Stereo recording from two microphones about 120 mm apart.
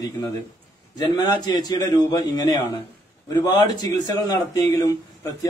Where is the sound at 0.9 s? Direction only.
35° left (ahead or behind).